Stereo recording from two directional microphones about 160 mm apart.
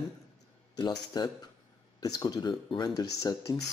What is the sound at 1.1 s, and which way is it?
Speech, 25° left (ahead or behind).